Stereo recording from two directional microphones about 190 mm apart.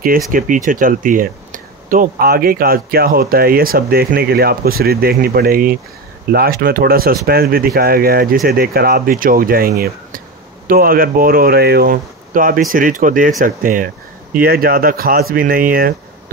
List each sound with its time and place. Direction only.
0.3 s speech: 45° right (ahead or behind)